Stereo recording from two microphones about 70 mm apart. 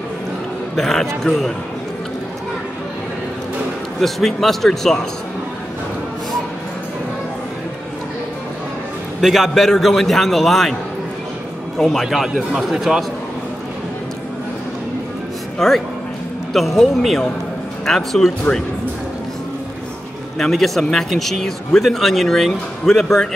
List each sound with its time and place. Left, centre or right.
0.7 s speech: centre
4.0 s speech: centre
9.2 s speech: centre
11.8 s speech: centre
15.6 s speech: centre
20.3 s speech: centre